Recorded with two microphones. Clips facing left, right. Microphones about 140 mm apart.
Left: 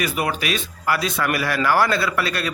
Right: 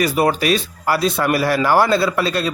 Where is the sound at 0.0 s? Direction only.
35° right (ahead or behind).